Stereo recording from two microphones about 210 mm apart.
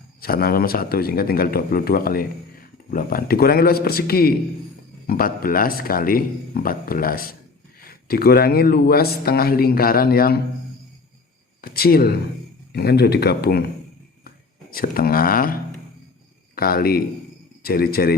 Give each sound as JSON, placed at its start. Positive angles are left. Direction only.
{"t": 0.2, "sound": "speech", "side_deg": 45}
{"t": 11.6, "sound": "speech", "side_deg": 45}
{"t": 14.7, "sound": "speech", "side_deg": 45}
{"t": 16.6, "sound": "speech", "side_deg": 45}